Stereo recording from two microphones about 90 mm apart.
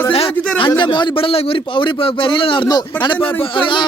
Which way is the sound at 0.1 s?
90° left.